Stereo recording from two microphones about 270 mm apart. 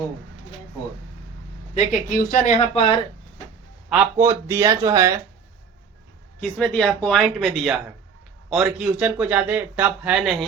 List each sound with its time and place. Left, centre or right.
1.7 s speech: left
3.8 s speech: centre
6.6 s speech: centre